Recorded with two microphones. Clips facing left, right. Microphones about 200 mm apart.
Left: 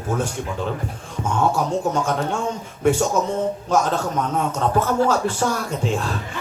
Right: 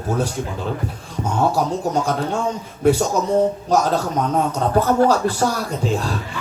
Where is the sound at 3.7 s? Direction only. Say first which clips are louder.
Even; 35° right (ahead or behind).